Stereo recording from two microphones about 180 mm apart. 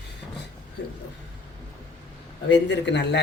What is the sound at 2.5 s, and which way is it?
Speech, 80° left.